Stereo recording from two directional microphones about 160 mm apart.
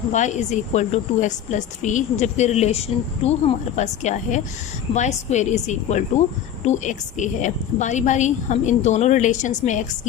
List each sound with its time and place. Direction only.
0.1 s a woman's voice: 50° left (ahead or behind)